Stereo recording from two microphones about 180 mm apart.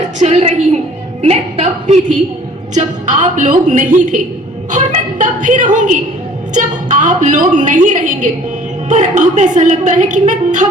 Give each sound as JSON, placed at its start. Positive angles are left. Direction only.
{"t": 0.2, "sound": "a woman's voice", "side_deg": -35}